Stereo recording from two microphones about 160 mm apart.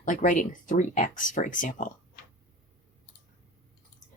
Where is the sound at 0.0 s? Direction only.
55° left (ahead or behind).